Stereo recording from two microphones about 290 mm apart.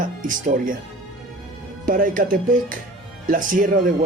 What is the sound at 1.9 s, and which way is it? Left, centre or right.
Speech, right.